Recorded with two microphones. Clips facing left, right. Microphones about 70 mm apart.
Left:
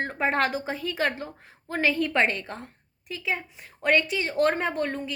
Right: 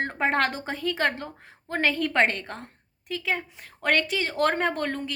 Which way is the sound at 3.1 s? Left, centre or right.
Right.